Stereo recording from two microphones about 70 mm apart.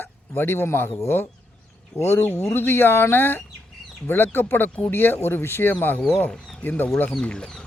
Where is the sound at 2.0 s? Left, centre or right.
Left.